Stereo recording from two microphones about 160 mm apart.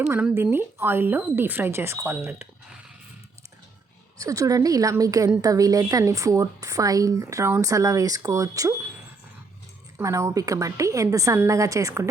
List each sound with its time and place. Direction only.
0.1 s speech: 10° right (ahead or behind)
4.2 s a woman's voice: 20° right (ahead or behind)
10.0 s a woman's voice: 20° right (ahead or behind)